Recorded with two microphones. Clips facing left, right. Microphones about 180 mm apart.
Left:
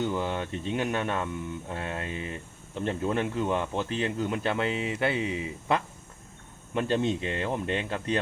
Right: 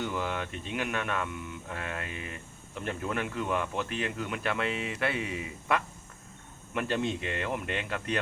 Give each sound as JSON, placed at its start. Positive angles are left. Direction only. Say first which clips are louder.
{"t": 0.0, "sound": "speech", "louder": "left 4 dB", "side_deg": 25}